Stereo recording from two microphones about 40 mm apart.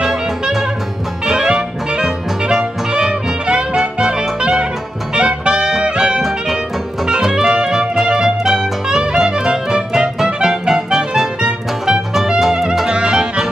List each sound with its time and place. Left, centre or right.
1.2 s music: right
12.4 s music: centre
12.8 s music: right